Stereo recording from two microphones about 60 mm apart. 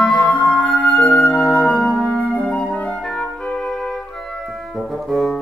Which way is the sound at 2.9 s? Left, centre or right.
Centre.